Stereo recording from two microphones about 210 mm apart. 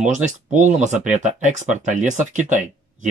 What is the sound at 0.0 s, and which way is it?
Speech, 35° right (ahead or behind).